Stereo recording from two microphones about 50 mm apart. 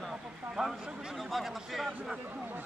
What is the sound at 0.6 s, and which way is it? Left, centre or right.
Speech, centre.